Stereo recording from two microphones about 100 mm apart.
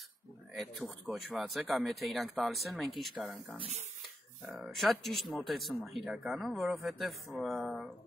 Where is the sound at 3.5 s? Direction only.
90° right.